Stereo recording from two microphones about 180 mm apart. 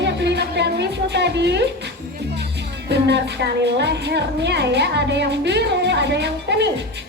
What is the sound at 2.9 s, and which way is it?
A woman's voice, 70° right (ahead or behind).